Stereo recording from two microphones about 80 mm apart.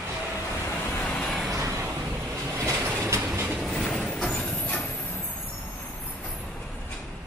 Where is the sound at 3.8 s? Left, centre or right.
Centre.